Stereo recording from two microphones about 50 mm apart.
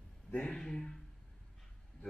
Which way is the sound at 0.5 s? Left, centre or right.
Centre.